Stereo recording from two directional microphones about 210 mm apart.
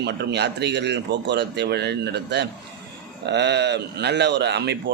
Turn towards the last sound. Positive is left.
turn(degrees=-55)  # may be behind; listen again after turning